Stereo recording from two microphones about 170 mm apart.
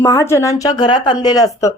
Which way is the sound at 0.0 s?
15° left (ahead or behind).